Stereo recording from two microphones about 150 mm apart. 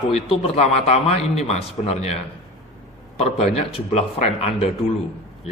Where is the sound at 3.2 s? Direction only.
40° left (ahead or behind).